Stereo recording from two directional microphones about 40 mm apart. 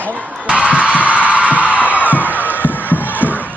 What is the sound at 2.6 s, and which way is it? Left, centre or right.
Music, left.